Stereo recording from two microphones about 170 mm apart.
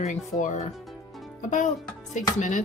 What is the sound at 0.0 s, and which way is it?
Speech, 45° left (ahead or behind).